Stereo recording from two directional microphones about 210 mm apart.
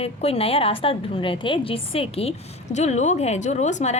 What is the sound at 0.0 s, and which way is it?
A woman's voice, 30° left (ahead or behind).